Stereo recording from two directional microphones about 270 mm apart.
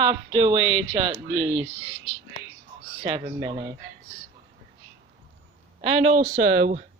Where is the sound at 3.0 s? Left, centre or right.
Centre.